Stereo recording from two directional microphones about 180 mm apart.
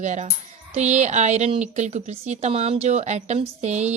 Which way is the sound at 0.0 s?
40° right (ahead or behind).